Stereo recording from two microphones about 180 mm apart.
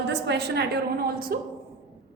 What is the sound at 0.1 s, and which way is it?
A woman's voice, 70° right (ahead or behind).